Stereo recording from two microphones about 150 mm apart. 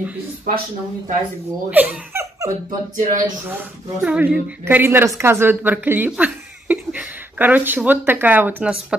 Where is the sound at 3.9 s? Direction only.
10° right (ahead or behind).